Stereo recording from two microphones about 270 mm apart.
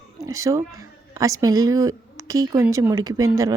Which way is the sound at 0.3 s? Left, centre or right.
Centre.